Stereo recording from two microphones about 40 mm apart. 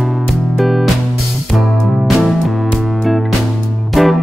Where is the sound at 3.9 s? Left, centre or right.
Centre.